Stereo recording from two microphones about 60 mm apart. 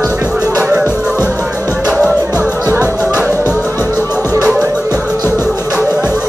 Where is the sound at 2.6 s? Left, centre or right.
Right.